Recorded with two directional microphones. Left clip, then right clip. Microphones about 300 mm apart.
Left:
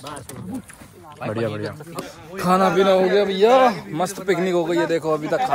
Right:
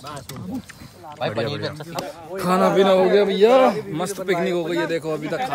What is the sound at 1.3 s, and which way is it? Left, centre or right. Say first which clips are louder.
A man's voice: even; centre.